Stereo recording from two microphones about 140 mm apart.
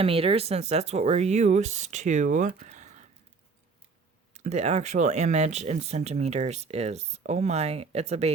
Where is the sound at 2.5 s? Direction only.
55° right (ahead or behind).